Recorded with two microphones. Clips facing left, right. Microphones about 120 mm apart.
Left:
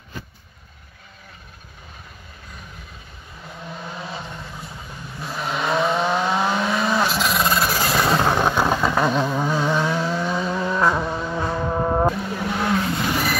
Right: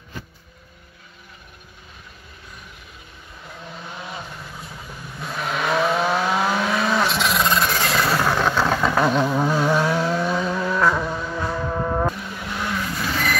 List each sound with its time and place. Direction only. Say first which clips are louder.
5.2 s vehicle: even; centre (ahead or behind)
8.0 s vehicle: left 2 dB; 20° left (ahead or behind)
8.7 s vehicle: right 1 dB; 5° left (ahead or behind); by 13.2 s 20° left (ahead or behind)